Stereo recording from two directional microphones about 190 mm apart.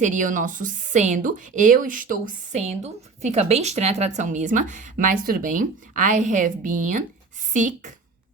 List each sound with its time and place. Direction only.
0.0 s a woman's voice: 40° right (ahead or behind)